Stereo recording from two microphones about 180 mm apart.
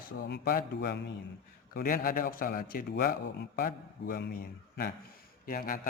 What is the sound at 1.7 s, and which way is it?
Speech, 50° left (ahead or behind).